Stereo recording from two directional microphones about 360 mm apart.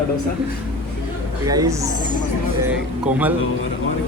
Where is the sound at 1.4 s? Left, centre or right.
Centre.